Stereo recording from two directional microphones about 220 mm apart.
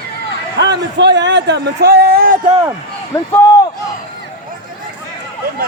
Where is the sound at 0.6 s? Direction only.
50° right (ahead or behind).